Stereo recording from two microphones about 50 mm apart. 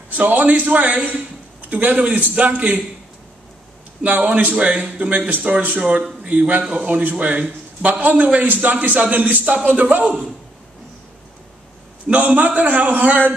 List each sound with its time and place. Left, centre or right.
0.1 s a man's voice: right
4.6 s a man's voice: right
9.4 s a man's voice: right
12.1 s a man's voice: right